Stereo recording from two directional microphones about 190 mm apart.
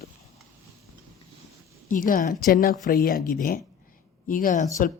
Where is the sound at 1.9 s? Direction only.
45° left (ahead or behind).